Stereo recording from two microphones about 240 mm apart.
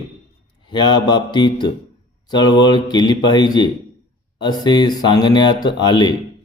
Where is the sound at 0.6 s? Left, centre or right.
Centre.